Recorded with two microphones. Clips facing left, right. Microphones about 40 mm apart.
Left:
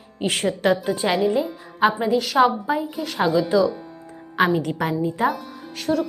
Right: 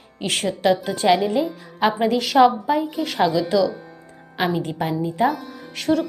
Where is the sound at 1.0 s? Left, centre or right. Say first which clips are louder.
Right 6 dB; centre.